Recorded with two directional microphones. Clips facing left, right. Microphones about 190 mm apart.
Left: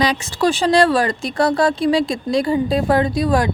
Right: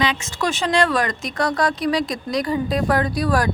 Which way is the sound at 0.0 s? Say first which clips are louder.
Left 5 dB; 35° left (ahead or behind).